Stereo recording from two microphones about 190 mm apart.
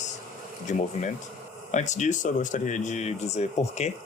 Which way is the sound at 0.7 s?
40° left (ahead or behind).